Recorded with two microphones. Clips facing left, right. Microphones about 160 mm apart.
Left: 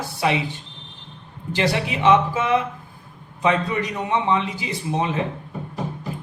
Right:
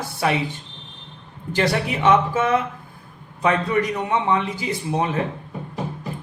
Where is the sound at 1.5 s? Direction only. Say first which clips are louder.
Right 1 dB; 20° left (ahead or behind).